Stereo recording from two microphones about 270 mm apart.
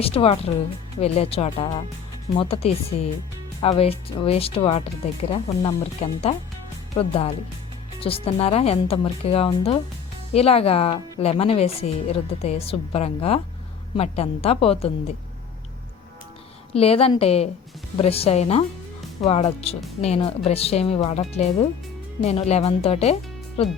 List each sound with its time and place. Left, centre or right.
0.0 s a woman's voice: left
16.7 s a woman's voice: left